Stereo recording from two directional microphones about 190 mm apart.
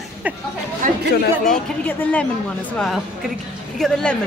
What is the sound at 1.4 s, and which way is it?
A woman's voice, 10° left (ahead or behind).